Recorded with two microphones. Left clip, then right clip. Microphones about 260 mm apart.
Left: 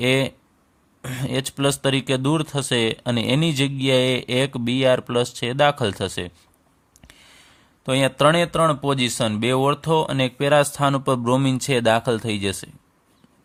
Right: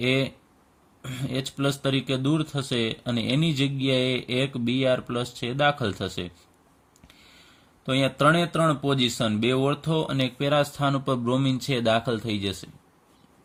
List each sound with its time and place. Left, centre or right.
0.0 s speech: left
7.9 s speech: left